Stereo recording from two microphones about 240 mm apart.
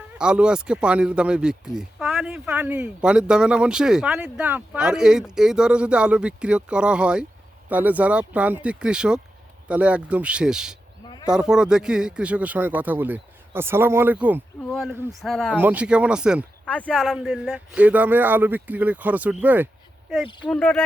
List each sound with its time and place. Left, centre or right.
0.2 s a man's voice: centre